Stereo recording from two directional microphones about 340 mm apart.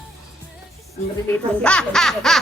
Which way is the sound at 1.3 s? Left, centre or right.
Centre.